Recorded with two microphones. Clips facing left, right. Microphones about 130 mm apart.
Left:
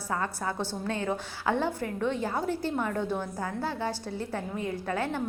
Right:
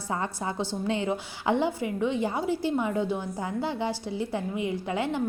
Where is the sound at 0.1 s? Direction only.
20° right (ahead or behind).